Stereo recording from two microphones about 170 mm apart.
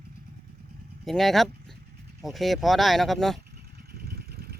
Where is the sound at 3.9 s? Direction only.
65° right (ahead or behind).